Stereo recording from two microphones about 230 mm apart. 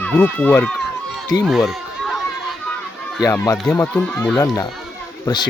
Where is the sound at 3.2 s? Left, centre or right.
Centre.